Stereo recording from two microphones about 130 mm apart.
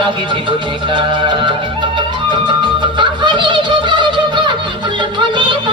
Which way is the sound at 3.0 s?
35° right (ahead or behind).